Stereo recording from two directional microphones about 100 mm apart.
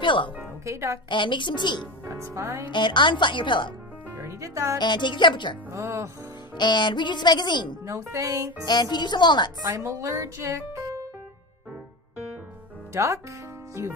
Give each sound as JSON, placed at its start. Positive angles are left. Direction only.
{"t": 0.0, "sound": "speech", "side_deg": 55}
{"t": 0.7, "sound": "speech", "side_deg": -30}
{"t": 1.0, "sound": "speech", "side_deg": 55}
{"t": 2.0, "sound": "speech", "side_deg": -30}
{"t": 2.7, "sound": "speech", "side_deg": 50}
{"t": 4.2, "sound": "speech", "side_deg": -30}
{"t": 4.7, "sound": "speech", "side_deg": 50}
{"t": 5.7, "sound": "speech", "side_deg": -30}
{"t": 6.5, "sound": "speech", "side_deg": 45}
{"t": 7.8, "sound": "speech", "side_deg": -30}
{"t": 8.6, "sound": "speech", "side_deg": 45}
{"t": 9.6, "sound": "music", "side_deg": -35}
{"t": 12.9, "sound": "speech", "side_deg": -30}